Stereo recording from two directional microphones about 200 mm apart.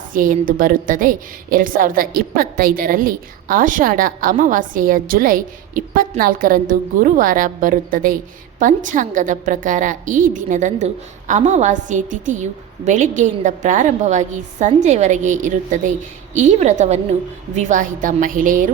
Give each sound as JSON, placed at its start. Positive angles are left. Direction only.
{"t": 0.1, "sound": "a woman's voice", "side_deg": -45}